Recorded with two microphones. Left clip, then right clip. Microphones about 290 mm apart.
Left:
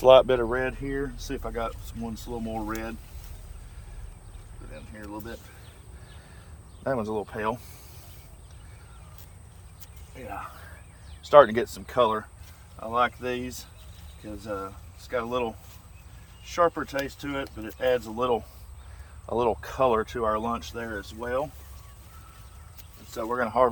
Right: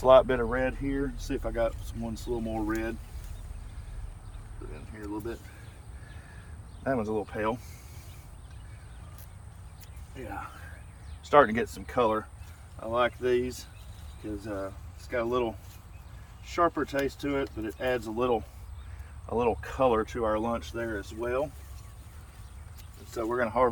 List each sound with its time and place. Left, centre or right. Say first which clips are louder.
0.0 s speech: left 3 dB; left
6.8 s speech: left 1 dB; left
10.2 s speech: left 3 dB; centre
23.1 s speech: left 2 dB; centre